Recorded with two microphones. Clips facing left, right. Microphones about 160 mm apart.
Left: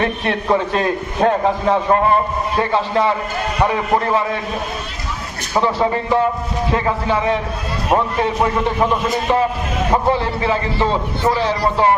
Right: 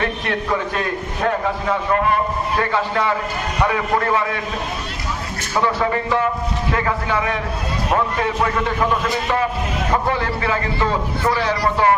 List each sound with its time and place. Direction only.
0.0 s a man's voice: 30° left (ahead or behind)
5.5 s a man's voice: 25° left (ahead or behind)